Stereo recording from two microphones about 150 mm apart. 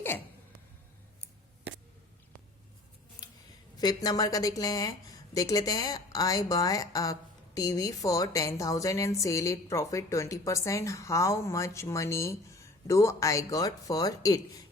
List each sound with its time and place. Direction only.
3.8 s a woman's voice: 25° left (ahead or behind)